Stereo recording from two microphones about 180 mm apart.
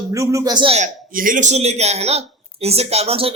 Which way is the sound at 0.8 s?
50° right (ahead or behind).